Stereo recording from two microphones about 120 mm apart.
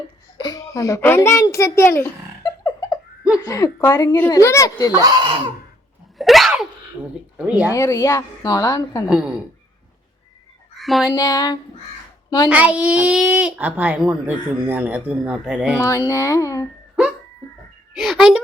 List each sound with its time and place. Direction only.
0.3 s a child's voice: 35° left (ahead or behind)
2.4 s a sound: 40° left (ahead or behind)
3.4 s a child's voice: 25° left (ahead or behind)
4.9 s speech: 30° right (ahead or behind)
6.1 s sneeze: centre (ahead or behind)
7.0 s speech: 20° right (ahead or behind)
7.7 s a child's voice: 25° left (ahead or behind)
9.0 s speech: 5° right (ahead or behind)
10.8 s speech: centre (ahead or behind)
11.1 s a sound: 30° left (ahead or behind)
12.5 s speech: 10° right (ahead or behind)
15.8 s a child's voice: 25° left (ahead or behind)
17.9 s a child's voice: centre (ahead or behind)